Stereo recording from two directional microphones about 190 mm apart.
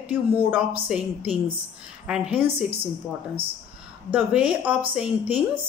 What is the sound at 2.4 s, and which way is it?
Speech, 30° right (ahead or behind).